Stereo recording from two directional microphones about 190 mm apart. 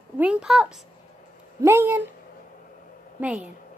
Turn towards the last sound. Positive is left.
turn(degrees=-5)  # may be behind; listen again after turning